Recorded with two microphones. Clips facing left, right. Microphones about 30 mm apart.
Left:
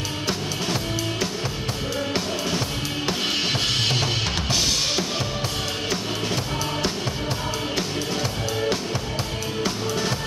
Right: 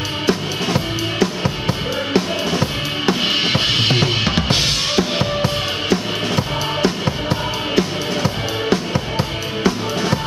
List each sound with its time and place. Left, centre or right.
2.1 s drum: right
4.5 s drum kit: right
4.9 s music: right